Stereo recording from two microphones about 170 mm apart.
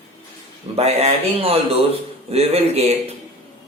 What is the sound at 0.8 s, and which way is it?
Speech, 40° right (ahead or behind).